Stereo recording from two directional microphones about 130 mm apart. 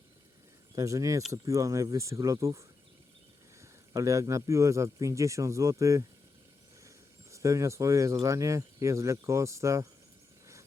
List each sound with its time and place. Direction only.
0.8 s a man's voice: 25° right (ahead or behind)